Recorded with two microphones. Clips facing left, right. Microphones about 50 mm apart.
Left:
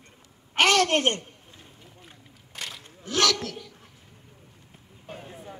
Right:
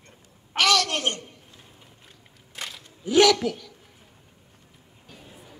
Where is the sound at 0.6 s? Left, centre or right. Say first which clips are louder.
Left 2 dB; left.